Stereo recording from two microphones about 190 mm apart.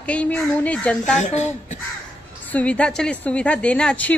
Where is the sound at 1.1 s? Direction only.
40° left (ahead or behind).